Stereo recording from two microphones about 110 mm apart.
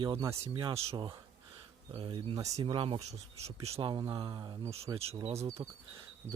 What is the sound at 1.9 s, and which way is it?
Speech, 50° right (ahead or behind).